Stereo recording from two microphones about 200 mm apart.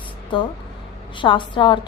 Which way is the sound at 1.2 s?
25° left (ahead or behind).